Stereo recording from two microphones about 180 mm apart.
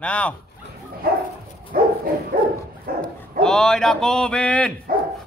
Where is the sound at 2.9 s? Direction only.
55° right (ahead or behind).